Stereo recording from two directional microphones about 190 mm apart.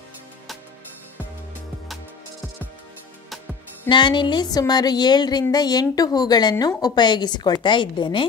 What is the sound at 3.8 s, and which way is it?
A woman's voice, 25° left (ahead or behind).